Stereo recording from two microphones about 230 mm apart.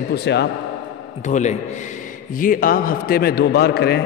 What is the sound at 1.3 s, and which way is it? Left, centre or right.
A man's voice, left.